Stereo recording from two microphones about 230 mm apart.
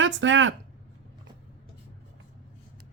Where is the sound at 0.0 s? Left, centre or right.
Right.